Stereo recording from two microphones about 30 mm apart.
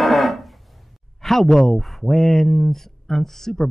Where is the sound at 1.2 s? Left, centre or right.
Centre.